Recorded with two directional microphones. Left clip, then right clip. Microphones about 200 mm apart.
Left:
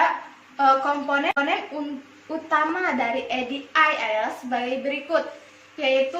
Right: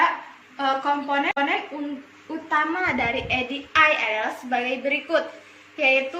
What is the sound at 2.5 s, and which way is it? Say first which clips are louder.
Speech: even; 15° left (ahead or behind).